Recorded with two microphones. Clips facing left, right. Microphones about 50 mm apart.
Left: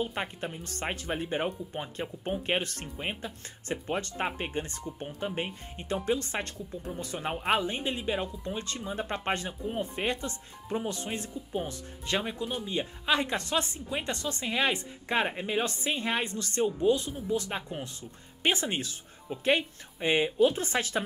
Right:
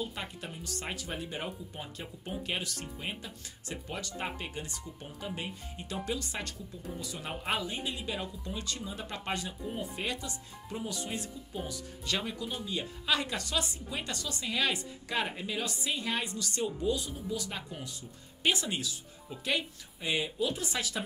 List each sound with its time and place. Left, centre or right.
0.0 s a woman's voice: left
12.2 s a woman's voice: left